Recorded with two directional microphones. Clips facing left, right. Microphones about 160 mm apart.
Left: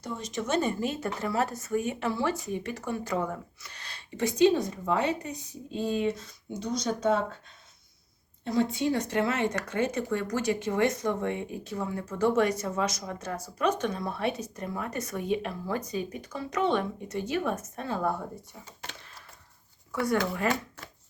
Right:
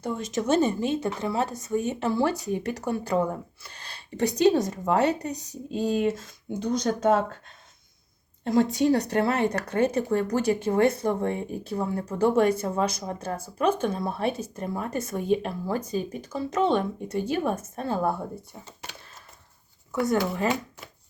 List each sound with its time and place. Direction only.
0.0 s speech: 50° right (ahead or behind)
0.4 s speech: 25° right (ahead or behind)
2.5 s speech: 40° right (ahead or behind)
6.1 s speech: 50° right (ahead or behind)
19.9 s speech: 25° right (ahead or behind)